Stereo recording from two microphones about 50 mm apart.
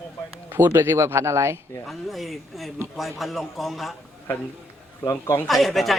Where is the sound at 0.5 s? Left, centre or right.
Right.